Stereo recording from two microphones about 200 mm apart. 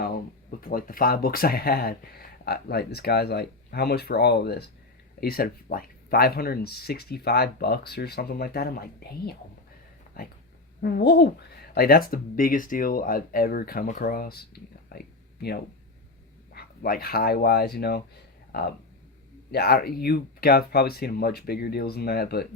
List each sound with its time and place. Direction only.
0.6 s speech: 45° left (ahead or behind)
14.9 s a sound: 50° left (ahead or behind)
16.5 s speech: 50° left (ahead or behind)